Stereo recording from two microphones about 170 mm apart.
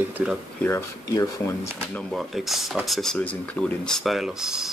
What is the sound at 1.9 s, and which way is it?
Speech, centre (ahead or behind).